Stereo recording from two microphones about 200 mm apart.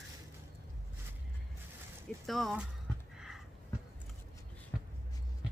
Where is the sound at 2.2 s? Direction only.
Centre (ahead or behind).